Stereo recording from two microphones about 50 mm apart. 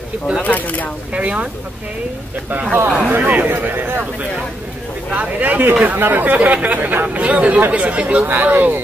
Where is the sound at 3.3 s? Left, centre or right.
Right.